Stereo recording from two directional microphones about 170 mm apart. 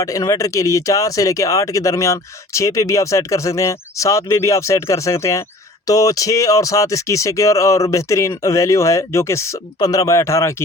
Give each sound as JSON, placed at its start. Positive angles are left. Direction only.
{"t": 0.0, "sound": "speech", "side_deg": 20}